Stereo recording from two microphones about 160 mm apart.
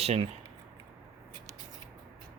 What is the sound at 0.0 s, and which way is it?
Speech, 40° right (ahead or behind).